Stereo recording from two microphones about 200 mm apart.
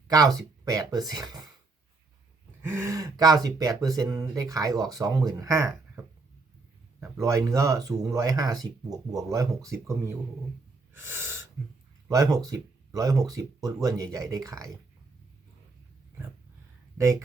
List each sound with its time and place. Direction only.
0.1 s speech: 15° right (ahead or behind)
2.6 s speech: 10° right (ahead or behind)
7.0 s speech: 15° right (ahead or behind)
10.9 s a sound: 10° right (ahead or behind)
12.0 s speech: 15° right (ahead or behind)
17.0 s speech: 15° right (ahead or behind)